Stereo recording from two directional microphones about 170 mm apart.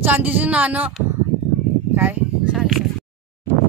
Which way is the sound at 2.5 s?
Centre (ahead or behind).